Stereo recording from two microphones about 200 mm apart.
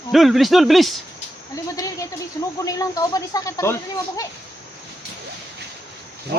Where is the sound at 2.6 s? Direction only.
15° left (ahead or behind).